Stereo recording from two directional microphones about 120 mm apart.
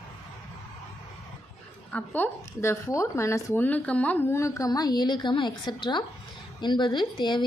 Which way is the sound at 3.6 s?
10° left (ahead or behind).